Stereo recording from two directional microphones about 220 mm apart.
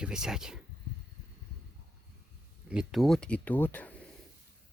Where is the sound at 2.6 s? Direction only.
Centre (ahead or behind).